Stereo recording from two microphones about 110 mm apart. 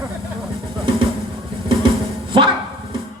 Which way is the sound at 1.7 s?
50° right (ahead or behind).